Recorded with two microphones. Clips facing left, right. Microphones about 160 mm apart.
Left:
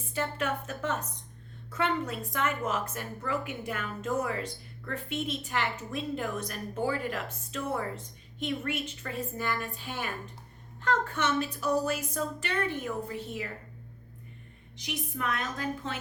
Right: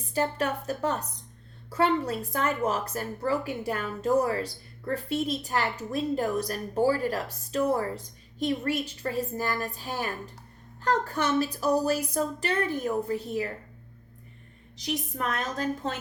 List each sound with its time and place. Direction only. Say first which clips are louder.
0.1 s a woman's voice: right 4 dB; 35° right (ahead or behind)
14.8 s a woman's voice: right 3 dB; 40° right (ahead or behind)